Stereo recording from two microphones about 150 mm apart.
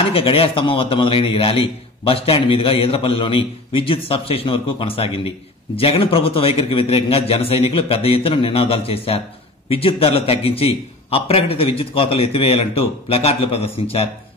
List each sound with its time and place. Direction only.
0.1 s a man's voice: 35° left (ahead or behind)